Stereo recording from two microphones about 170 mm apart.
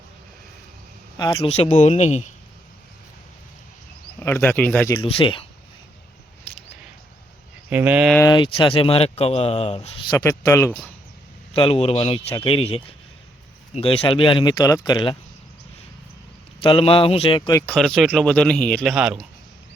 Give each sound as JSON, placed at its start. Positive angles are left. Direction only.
{"t": 1.1, "sound": "a man's voice", "side_deg": 25}
{"t": 1.5, "sound": "speech", "side_deg": 40}
{"t": 4.2, "sound": "speech", "side_deg": 15}
{"t": 5.0, "sound": "speech", "side_deg": 30}
{"t": 6.5, "sound": "single-lens reflex camera", "side_deg": 10}
{"t": 7.7, "sound": "speech", "side_deg": -10}
{"t": 8.3, "sound": "speech", "side_deg": 30}
{"t": 10.2, "sound": "speech", "side_deg": 20}
{"t": 11.5, "sound": "speech", "side_deg": 35}
{"t": 16.6, "sound": "speech", "side_deg": 35}
{"t": 17.7, "sound": "a man's voice", "side_deg": 5}